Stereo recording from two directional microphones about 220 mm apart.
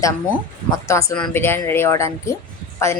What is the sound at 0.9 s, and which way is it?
A woman's voice, 15° left (ahead or behind).